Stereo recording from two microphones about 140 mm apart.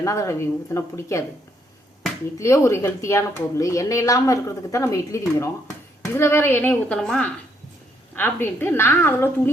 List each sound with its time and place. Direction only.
0.0 s a woman's voice: 20° left (ahead or behind)
2.4 s a woman's voice: 20° left (ahead or behind)